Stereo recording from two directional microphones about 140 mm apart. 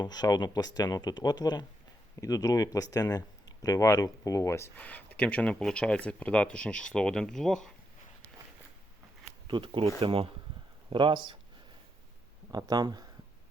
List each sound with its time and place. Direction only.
0.0 s speech: 30° left (ahead or behind); by 7.7 s 5° left (ahead or behind)
9.5 s speech: 35° right (ahead or behind)
12.5 s speech: 30° right (ahead or behind)